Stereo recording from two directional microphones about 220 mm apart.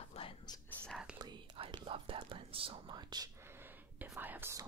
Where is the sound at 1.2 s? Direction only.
20° right (ahead or behind).